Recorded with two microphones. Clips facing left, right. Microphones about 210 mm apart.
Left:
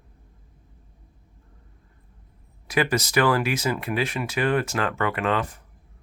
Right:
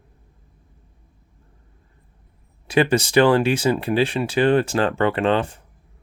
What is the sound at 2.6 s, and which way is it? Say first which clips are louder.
Speech: right 6 dB; 30° right (ahead or behind).